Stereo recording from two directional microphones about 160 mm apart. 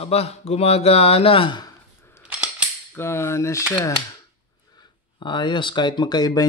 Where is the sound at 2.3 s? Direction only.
5° right (ahead or behind).